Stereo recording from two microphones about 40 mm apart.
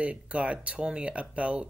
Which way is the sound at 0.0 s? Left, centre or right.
Right.